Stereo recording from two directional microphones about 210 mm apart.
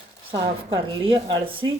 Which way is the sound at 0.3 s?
25° right (ahead or behind).